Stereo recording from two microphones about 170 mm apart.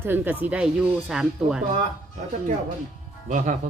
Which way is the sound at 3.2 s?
50° right (ahead or behind).